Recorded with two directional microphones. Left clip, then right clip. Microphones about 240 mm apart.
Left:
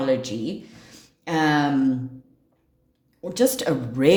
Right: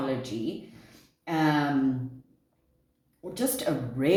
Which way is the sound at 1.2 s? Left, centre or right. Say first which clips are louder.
Left 5 dB; left.